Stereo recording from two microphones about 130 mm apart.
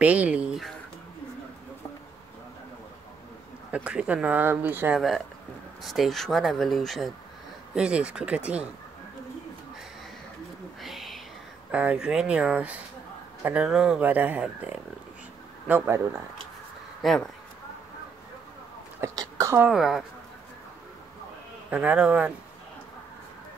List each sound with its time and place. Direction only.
0.0 s speech: 10° right (ahead or behind)
3.7 s speech: 10° right (ahead or behind)
5.8 s speech: centre (ahead or behind)
10.8 s a sound: centre (ahead or behind)
11.7 s speech: 10° right (ahead or behind)
17.0 s speech: centre (ahead or behind)
19.1 s a sound: 25° right (ahead or behind)
19.6 s speech: 5° right (ahead or behind)
21.6 s speech: 10° right (ahead or behind)